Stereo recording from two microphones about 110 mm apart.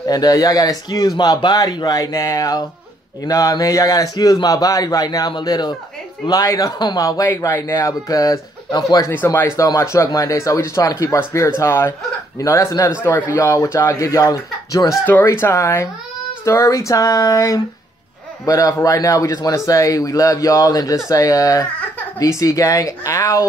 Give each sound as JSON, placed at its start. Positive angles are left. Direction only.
{"t": 0.0, "sound": "speech", "side_deg": 35}
{"t": 9.1, "sound": "speech", "side_deg": 20}